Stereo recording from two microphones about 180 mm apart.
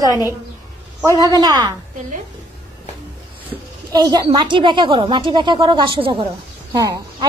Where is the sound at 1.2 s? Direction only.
20° right (ahead or behind).